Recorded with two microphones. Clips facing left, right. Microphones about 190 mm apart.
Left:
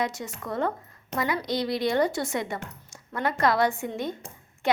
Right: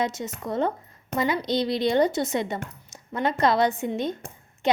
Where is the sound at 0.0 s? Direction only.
25° right (ahead or behind).